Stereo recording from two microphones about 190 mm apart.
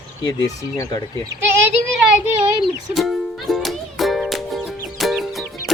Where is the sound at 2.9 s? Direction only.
Centre (ahead or behind).